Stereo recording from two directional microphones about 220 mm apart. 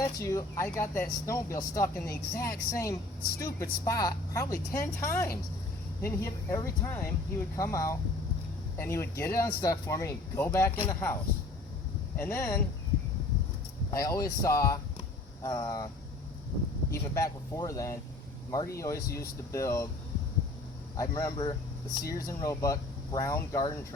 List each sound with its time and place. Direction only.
0.0 s speech: 15° left (ahead or behind)
12.1 s speech: 10° left (ahead or behind)
13.9 s speech: 15° left (ahead or behind)
16.9 s speech: 15° left (ahead or behind)
20.9 s speech: 15° left (ahead or behind)